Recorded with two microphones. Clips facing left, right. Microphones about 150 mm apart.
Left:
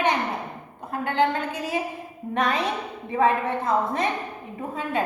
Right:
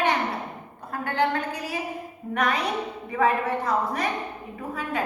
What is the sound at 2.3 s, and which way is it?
A woman's voice, 30° left (ahead or behind).